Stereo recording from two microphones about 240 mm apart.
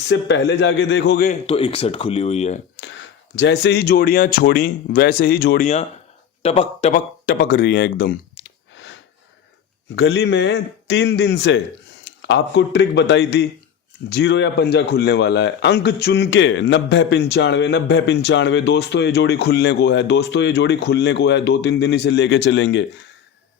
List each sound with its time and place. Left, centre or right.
0.1 s speech: left
1.5 s speech: left
2.7 s speech: left
9.9 s speech: left